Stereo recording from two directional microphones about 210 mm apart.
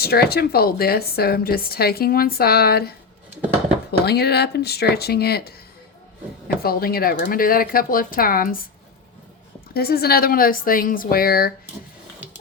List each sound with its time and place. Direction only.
0.0 s a woman's voice: 50° left (ahead or behind)
4.0 s a woman's voice: 50° left (ahead or behind)
6.6 s a woman's voice: 45° left (ahead or behind)
9.7 s a woman's voice: 45° left (ahead or behind)